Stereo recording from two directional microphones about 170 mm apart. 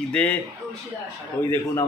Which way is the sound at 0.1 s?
10° left (ahead or behind).